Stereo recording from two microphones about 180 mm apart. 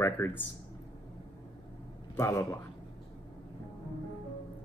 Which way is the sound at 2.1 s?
15° left (ahead or behind).